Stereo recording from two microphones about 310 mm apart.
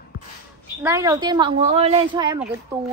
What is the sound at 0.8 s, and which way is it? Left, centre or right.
A woman's voice, centre.